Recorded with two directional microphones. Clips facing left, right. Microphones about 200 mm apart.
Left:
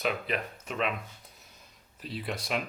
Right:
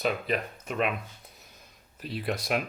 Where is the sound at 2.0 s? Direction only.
50° right (ahead or behind).